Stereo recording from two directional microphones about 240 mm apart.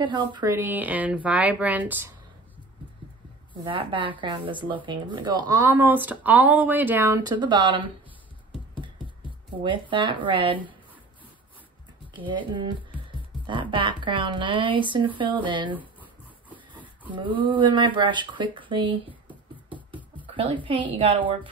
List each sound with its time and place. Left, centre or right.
0.0 s speech: centre
3.6 s speech: right
9.6 s speech: centre
12.3 s speech: centre
16.4 s a sound: centre
17.1 s speech: right
19.0 s a sound: centre
20.6 s speech: right